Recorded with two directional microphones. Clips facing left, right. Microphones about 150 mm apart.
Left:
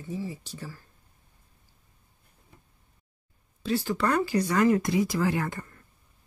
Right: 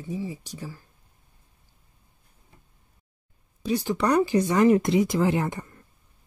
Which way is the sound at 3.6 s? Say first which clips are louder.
Right 2 dB; 15° right (ahead or behind).